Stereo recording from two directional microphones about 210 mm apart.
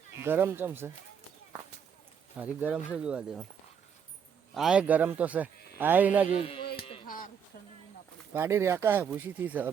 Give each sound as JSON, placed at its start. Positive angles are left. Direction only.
{"t": 0.2, "sound": "speech", "side_deg": -10}
{"t": 2.4, "sound": "speech", "side_deg": -10}
{"t": 4.5, "sound": "speech", "side_deg": -5}
{"t": 6.3, "sound": "speech", "side_deg": 25}
{"t": 8.3, "sound": "speech", "side_deg": -10}